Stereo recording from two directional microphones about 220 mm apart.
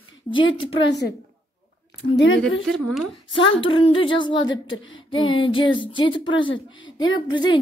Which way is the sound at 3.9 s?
25° left (ahead or behind).